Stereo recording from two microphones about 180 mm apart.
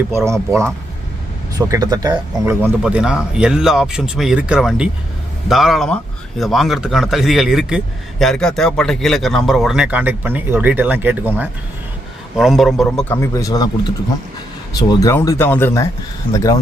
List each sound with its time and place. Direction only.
1.5 s speech: 20° right (ahead or behind); by 13.1 s centre (ahead or behind)
13.1 s speech: 15° left (ahead or behind)